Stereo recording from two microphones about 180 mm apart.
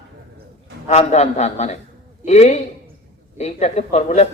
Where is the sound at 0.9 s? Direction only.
35° left (ahead or behind).